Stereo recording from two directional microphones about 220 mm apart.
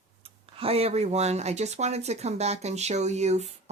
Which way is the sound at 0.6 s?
25° right (ahead or behind).